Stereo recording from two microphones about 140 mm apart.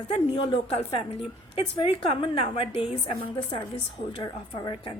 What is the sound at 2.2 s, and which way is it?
A woman's voice, 40° left (ahead or behind).